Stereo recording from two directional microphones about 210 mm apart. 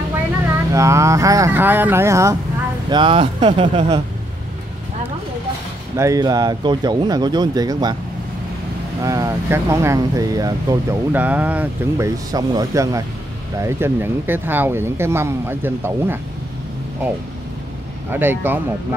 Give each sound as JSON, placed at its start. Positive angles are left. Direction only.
{"t": 0.7, "sound": "speech", "side_deg": -15}
{"t": 2.9, "sound": "speech", "side_deg": -25}
{"t": 5.9, "sound": "speech", "side_deg": -15}
{"t": 9.0, "sound": "speech", "side_deg": -15}
{"t": 18.1, "sound": "speech", "side_deg": -10}